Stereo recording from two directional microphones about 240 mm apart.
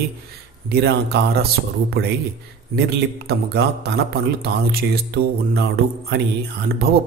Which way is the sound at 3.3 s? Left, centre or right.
Right.